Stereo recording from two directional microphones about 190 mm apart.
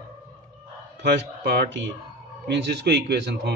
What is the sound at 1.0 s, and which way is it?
A man's voice, 60° right (ahead or behind).